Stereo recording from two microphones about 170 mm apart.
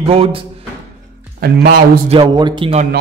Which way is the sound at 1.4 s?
60° right (ahead or behind).